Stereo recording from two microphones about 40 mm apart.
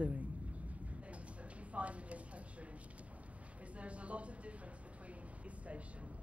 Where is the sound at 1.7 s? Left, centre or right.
Right.